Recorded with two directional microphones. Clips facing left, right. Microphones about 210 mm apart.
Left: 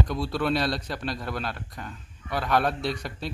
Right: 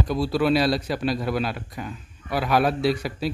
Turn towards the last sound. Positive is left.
turn(degrees=-5)  # may be behind; listen again after turning